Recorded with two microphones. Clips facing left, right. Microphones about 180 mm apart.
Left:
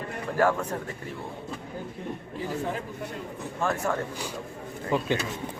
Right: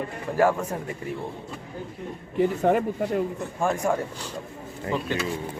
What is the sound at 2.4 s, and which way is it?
Speech, 65° right (ahead or behind).